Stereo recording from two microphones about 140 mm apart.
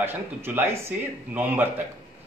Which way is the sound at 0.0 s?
15° right (ahead or behind).